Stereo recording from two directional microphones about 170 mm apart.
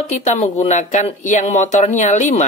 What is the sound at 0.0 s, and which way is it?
Speech, 40° left (ahead or behind).